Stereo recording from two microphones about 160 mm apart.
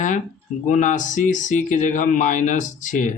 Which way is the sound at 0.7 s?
50° left (ahead or behind).